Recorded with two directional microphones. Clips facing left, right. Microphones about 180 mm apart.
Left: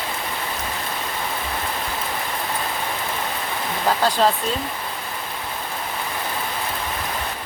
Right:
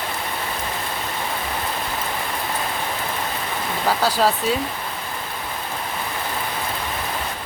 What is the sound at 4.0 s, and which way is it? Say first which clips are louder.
Speech: left 1 dB; 10° right (ahead or behind).